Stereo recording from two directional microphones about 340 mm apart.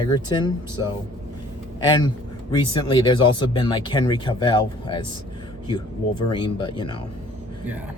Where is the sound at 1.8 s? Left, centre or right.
Centre.